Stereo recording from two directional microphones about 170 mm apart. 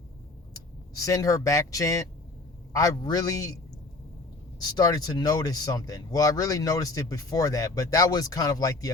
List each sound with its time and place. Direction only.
0.9 s speech: 20° left (ahead or behind)
4.6 s speech: 20° left (ahead or behind)